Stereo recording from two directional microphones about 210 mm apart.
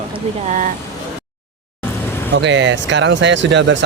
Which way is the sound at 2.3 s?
60° right (ahead or behind).